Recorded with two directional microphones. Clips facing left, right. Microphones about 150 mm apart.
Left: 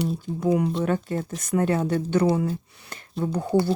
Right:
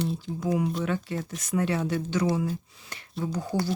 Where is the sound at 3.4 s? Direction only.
25° left (ahead or behind).